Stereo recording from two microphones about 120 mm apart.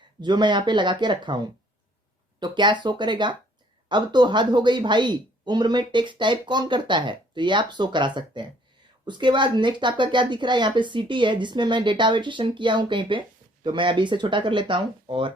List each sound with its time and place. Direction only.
0.2 s speech: 35° right (ahead or behind)